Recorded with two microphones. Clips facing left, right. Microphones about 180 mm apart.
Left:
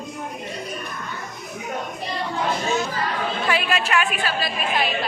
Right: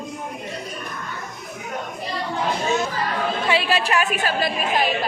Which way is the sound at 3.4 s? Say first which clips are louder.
Right 2 dB; 30° right (ahead or behind).